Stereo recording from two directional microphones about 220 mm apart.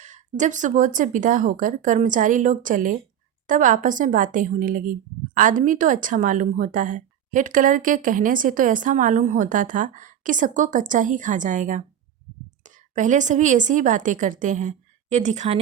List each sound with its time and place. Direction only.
0.0 s a woman's voice: 35° right (ahead or behind)